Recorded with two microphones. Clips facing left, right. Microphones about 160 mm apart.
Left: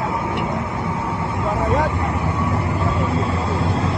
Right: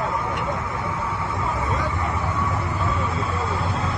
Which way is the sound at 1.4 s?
65° left (ahead or behind).